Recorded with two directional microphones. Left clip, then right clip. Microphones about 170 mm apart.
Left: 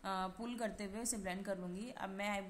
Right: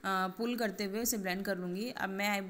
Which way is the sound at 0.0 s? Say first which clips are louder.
Right 8 dB; 10° right (ahead or behind).